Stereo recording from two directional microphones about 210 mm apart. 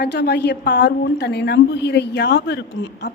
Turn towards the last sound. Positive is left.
turn(degrees=55)  # may be behind; listen again after turning